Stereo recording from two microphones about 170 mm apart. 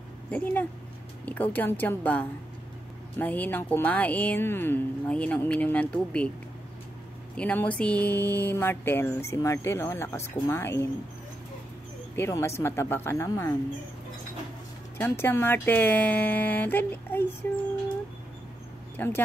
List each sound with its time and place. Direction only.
0.3 s speech: 10° left (ahead or behind)
7.3 s speech: 10° left (ahead or behind)
12.2 s speech: 15° left (ahead or behind)
15.0 s speech: 15° left (ahead or behind)
18.9 s speech: 10° left (ahead or behind)